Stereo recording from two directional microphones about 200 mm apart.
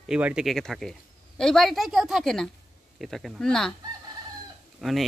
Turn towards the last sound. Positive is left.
turn(degrees=0)  # may be behind; listen again after turning